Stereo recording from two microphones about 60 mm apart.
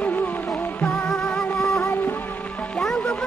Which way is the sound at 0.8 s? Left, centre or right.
Left.